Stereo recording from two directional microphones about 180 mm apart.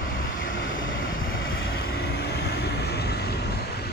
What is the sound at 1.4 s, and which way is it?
Vehicle, 65° left (ahead or behind).